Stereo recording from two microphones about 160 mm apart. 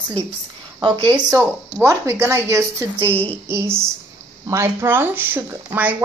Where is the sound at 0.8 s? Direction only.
30° right (ahead or behind).